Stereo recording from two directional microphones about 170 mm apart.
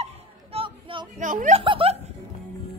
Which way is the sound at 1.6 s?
30° right (ahead or behind).